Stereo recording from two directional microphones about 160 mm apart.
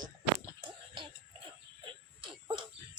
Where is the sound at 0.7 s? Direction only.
30° right (ahead or behind).